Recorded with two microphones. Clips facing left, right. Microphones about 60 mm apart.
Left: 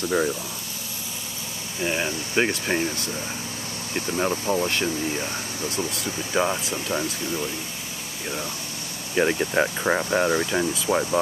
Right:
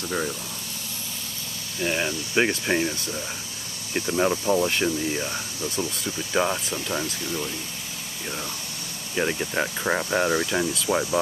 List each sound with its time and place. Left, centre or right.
0.0 s speech: centre
1.8 s speech: centre
3.9 s speech: centre
5.8 s speech: centre
6.3 s speech: centre
9.1 s speech: centre